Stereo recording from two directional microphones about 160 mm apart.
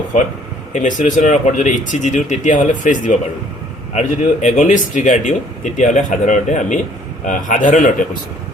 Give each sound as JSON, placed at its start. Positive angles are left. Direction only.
{"t": 0.7, "sound": "a man's voice", "side_deg": 50}